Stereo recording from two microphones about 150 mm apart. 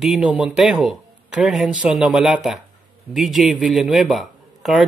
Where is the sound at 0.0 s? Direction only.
5° right (ahead or behind).